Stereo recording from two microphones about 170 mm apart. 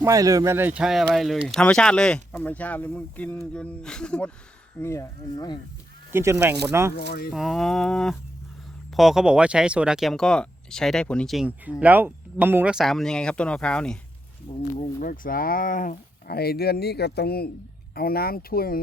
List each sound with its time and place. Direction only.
0.0 s speech: 20° right (ahead or behind); by 4.3 s 5° left (ahead or behind)
4.8 s speech: 15° left (ahead or behind)
6.1 s speech: 15° right (ahead or behind)
7.3 s speech: centre (ahead or behind)
14.8 s speech: 50° left (ahead or behind)